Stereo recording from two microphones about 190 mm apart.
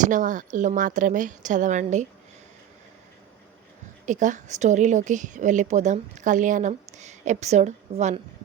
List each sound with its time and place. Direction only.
0.0 s a woman's voice: 45° right (ahead or behind)
4.0 s a woman's voice: 40° right (ahead or behind)